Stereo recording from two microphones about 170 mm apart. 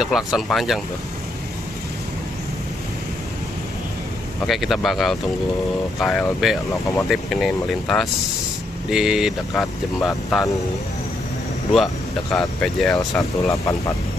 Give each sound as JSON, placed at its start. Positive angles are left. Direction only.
{"t": 0.0, "sound": "speech", "side_deg": 0}
{"t": 4.5, "sound": "speech", "side_deg": 0}
{"t": 11.7, "sound": "speech", "side_deg": 0}
{"t": 13.1, "sound": "speech", "side_deg": 20}